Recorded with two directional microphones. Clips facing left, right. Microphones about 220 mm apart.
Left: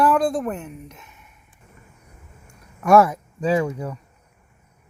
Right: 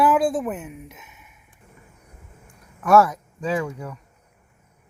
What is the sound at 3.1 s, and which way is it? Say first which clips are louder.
Speech: left 4 dB; 30° left (ahead or behind).